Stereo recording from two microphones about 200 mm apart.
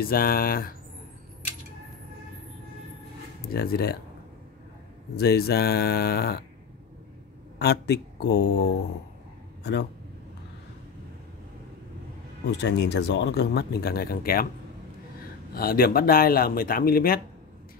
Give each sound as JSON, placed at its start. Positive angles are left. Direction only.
{"t": 0.0, "sound": "speech", "side_deg": 45}
{"t": 3.4, "sound": "speech", "side_deg": 50}
{"t": 5.1, "sound": "speech", "side_deg": 50}
{"t": 7.5, "sound": "speech", "side_deg": 55}
{"t": 9.6, "sound": "a sound", "side_deg": 60}
{"t": 12.4, "sound": "speech", "side_deg": 60}
{"t": 15.5, "sound": "speech", "side_deg": 50}